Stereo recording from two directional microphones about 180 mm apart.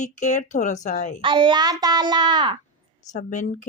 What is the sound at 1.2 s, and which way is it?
Female singing, 30° right (ahead or behind).